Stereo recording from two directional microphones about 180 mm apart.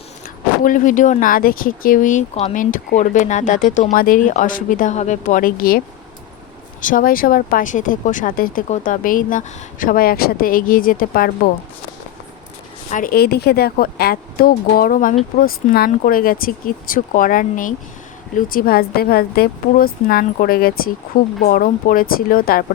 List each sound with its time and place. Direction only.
0.6 s speech: 45° left (ahead or behind)
6.8 s speech: 50° left (ahead or behind)
12.9 s speech: 50° left (ahead or behind)